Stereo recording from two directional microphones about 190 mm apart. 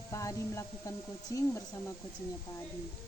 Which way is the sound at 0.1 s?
15° left (ahead or behind).